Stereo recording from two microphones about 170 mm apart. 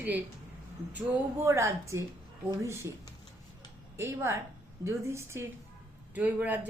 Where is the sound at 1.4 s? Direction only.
15° right (ahead or behind).